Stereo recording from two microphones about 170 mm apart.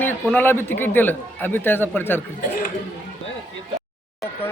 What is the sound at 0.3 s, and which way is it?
A man's voice, 15° left (ahead or behind).